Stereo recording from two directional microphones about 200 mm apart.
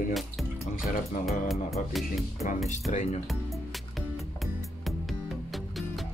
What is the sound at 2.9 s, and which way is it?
Speech, 35° left (ahead or behind).